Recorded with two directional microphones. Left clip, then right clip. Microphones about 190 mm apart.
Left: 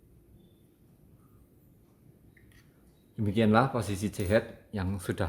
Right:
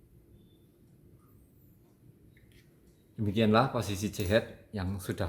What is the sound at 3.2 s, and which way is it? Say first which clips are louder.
Speech: left 1 dB; 30° left (ahead or behind).